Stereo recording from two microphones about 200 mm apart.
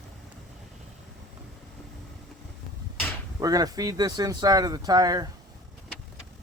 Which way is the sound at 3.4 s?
20° right (ahead or behind).